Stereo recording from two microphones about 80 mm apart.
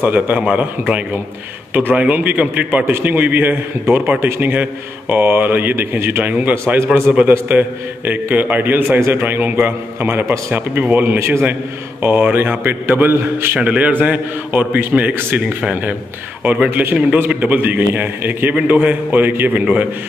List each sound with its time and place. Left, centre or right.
0.0 s a man's voice: centre
11.1 s a man's voice: right
13.6 s a man's voice: centre